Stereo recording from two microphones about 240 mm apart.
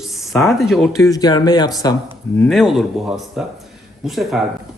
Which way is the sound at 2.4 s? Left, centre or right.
Centre.